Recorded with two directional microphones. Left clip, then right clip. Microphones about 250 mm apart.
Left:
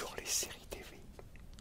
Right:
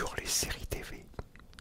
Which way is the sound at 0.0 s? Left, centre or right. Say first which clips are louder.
Right 5 dB; right.